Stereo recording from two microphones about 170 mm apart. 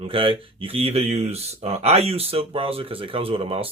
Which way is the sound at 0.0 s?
30° right (ahead or behind).